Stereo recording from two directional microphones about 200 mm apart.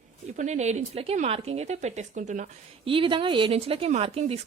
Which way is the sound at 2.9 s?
25° right (ahead or behind).